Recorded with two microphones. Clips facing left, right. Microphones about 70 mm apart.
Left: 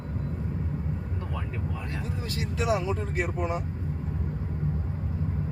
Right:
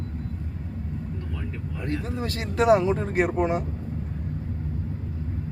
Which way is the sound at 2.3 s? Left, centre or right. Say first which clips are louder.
Right 8 dB; right.